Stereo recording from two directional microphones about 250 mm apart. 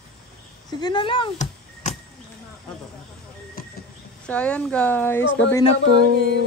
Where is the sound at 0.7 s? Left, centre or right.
Centre.